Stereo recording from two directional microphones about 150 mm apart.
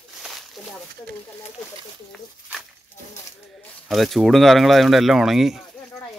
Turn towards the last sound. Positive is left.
turn(degrees=0)  # may be behind; listen again after turning